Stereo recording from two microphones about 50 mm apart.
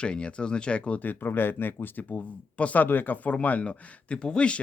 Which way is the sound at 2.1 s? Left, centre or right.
Left.